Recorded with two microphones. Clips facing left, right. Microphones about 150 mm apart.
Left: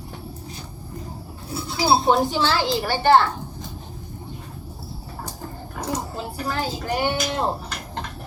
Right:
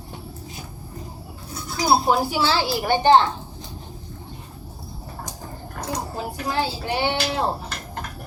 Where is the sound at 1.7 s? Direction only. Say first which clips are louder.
Even; 30° left (ahead or behind).